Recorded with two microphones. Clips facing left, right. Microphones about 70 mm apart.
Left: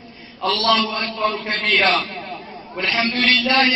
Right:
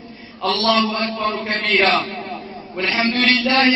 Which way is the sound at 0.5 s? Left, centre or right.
Right.